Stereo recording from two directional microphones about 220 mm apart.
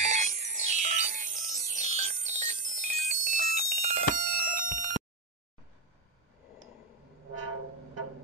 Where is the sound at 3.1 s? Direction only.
35° right (ahead or behind).